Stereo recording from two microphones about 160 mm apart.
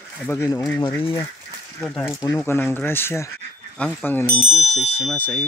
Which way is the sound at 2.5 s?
15° left (ahead or behind).